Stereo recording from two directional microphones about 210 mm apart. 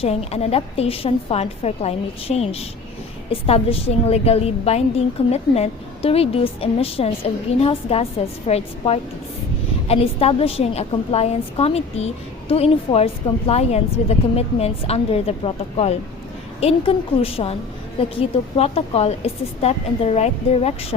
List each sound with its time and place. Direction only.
0.0 s a woman's voice: 30° left (ahead or behind)